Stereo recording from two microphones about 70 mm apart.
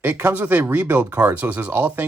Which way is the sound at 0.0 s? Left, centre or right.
Right.